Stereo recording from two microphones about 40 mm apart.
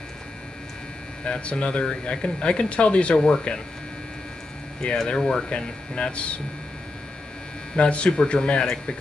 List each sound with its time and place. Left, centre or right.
1.2 s speech: left
5.0 s speech: left
7.7 s speech: left